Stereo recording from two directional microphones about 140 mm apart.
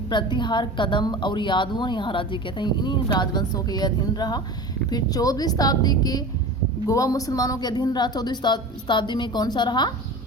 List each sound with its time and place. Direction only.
0.1 s a woman's voice: 35° left (ahead or behind)